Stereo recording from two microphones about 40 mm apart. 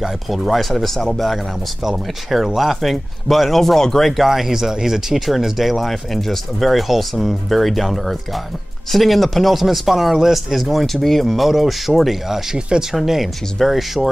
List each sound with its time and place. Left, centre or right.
0.3 s speech: centre
4.2 s speech: centre
12.5 s speech: right
12.9 s speech: centre